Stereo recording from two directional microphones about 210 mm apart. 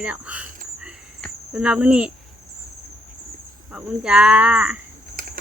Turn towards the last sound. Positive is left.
turn(degrees=-40)  # may be behind; listen again after turning